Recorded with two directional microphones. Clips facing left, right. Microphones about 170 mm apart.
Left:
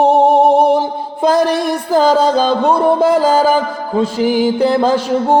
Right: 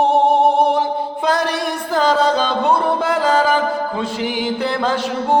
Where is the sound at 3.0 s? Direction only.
40° left (ahead or behind).